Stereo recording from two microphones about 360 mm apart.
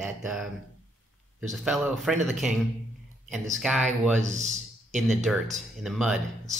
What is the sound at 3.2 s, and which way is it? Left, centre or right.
Speech, centre.